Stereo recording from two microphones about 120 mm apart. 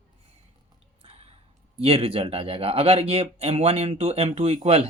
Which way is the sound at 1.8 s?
55° right (ahead or behind).